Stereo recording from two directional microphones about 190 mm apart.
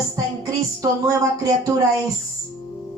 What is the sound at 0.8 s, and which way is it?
Speech, 15° right (ahead or behind).